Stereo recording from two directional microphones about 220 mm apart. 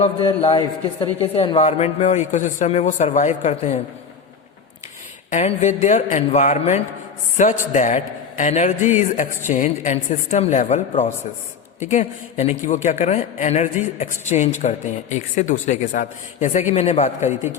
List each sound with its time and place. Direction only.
0.0 s a man's voice: 25° left (ahead or behind)
5.3 s a man's voice: 30° left (ahead or behind)